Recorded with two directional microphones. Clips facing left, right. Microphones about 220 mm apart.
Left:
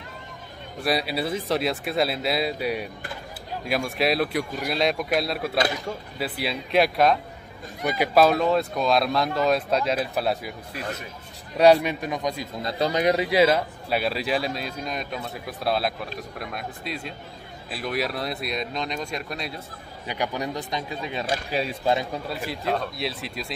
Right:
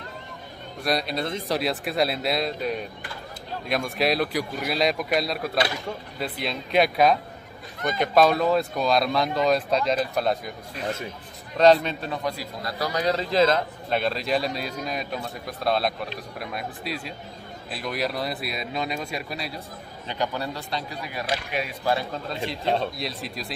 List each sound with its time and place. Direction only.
0.8 s speech: 5° left (ahead or behind)
11.5 s a man's voice: 10° left (ahead or behind)
20.1 s speech: 15° left (ahead or behind)
22.9 s speech: centre (ahead or behind)